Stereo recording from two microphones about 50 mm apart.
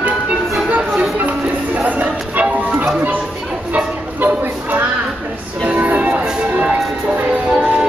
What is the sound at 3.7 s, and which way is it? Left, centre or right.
Music, right.